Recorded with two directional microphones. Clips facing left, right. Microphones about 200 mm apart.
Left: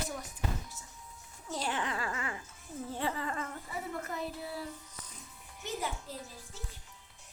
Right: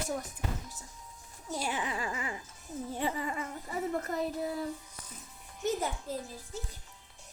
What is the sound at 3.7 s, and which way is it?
Speech, 40° right (ahead or behind).